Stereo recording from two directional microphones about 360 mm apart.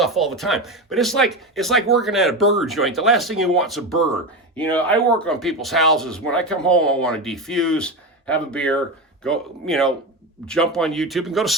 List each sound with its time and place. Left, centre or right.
0.0 s speech: centre